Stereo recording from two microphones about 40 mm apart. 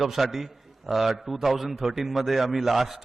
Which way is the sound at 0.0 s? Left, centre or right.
Centre.